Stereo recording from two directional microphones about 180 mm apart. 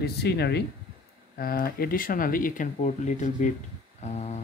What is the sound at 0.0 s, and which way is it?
Speech, 65° left (ahead or behind).